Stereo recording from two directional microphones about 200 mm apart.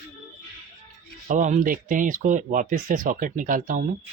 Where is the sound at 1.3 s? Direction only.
40° right (ahead or behind).